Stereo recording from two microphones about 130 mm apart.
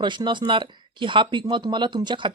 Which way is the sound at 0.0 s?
35° right (ahead or behind).